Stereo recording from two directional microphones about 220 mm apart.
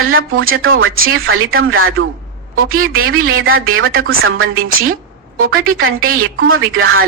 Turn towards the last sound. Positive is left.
turn(degrees=-70)  # may be behind; listen again after turning